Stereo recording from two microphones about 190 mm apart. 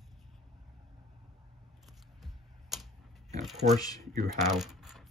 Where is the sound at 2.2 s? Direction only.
Centre (ahead or behind).